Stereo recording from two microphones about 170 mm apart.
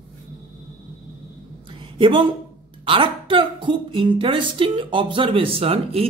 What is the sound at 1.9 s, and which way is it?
Speech, 30° right (ahead or behind).